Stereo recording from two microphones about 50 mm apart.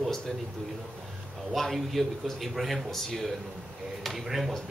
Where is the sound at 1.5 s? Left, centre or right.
Centre.